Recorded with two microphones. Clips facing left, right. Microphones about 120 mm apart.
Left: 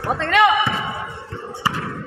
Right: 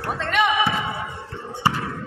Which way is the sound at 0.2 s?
90° left.